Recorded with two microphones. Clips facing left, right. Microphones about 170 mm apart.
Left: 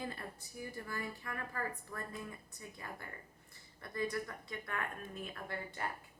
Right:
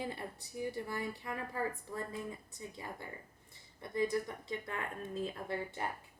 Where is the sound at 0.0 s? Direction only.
20° right (ahead or behind).